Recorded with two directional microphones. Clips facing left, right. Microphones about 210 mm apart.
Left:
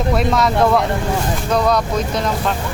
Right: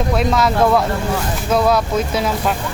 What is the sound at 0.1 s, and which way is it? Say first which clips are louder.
Speech: left 1 dB; centre (ahead or behind).